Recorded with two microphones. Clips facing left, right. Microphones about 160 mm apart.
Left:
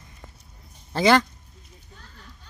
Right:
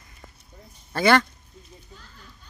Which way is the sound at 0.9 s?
15° left (ahead or behind).